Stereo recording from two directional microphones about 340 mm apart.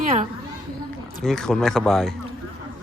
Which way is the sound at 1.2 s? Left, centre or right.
Centre.